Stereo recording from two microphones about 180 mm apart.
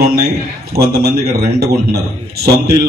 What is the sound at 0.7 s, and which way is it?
Speech, 60° right (ahead or behind).